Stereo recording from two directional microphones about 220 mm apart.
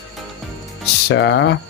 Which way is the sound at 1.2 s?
55° left (ahead or behind).